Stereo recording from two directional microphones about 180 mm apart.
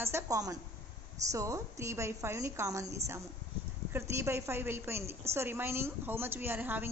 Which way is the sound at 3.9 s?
15° right (ahead or behind).